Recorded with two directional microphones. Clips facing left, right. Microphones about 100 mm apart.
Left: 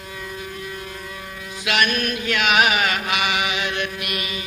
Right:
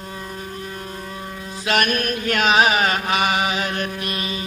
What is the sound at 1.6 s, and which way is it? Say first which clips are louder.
Carnatic music: right 1 dB; 45° right (ahead or behind).